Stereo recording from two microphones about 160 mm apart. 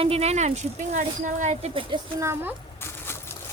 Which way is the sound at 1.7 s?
35° right (ahead or behind).